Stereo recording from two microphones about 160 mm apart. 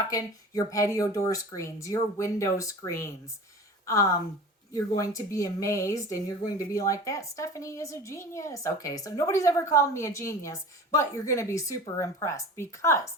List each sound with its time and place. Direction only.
0.1 s speech: 20° left (ahead or behind)